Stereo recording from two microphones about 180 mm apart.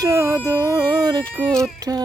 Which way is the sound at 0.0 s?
15° right (ahead or behind).